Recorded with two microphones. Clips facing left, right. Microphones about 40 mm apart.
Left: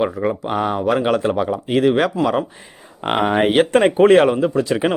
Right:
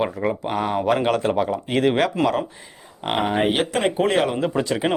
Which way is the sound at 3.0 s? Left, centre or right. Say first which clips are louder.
Left 4 dB; left.